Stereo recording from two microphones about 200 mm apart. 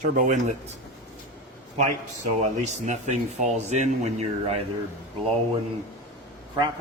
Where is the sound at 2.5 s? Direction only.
35° right (ahead or behind).